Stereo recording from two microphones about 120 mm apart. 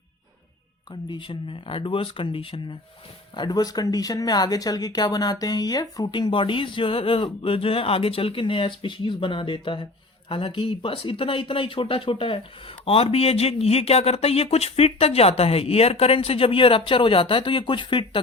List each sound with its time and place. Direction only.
1.1 s speech: 45° left (ahead or behind)
3.3 s speech: 35° left (ahead or behind)